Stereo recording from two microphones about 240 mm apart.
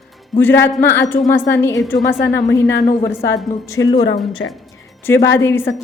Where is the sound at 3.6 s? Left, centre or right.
Centre.